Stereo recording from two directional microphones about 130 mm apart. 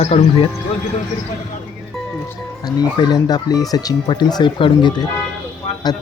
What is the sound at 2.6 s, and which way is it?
Speech, 30° left (ahead or behind).